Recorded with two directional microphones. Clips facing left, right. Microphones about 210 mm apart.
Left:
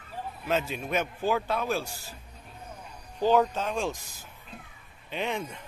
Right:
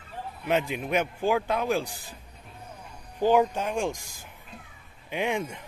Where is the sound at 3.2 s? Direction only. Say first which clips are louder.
Right 1 dB; 15° right (ahead or behind).